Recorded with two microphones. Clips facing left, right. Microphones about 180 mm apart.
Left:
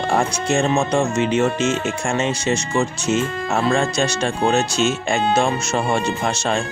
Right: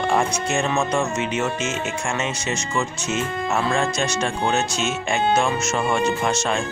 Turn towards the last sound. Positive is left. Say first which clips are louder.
# left 1 dB
turn(degrees=35)  # may be behind; listen again after turning